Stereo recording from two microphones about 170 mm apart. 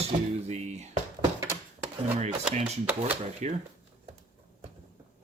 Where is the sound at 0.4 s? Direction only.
40° right (ahead or behind).